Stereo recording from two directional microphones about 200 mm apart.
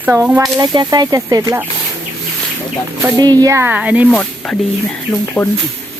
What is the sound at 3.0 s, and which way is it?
Speech, 20° right (ahead or behind).